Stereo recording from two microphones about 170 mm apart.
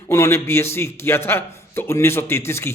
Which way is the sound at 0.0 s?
15° left (ahead or behind).